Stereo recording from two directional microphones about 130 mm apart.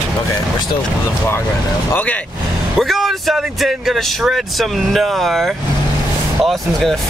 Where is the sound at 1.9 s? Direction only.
10° left (ahead or behind).